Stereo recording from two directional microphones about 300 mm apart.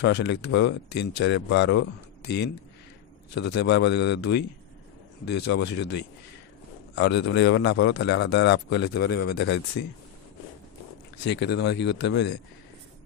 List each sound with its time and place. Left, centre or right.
0.0 s a man's voice: left
11.2 s a man's voice: left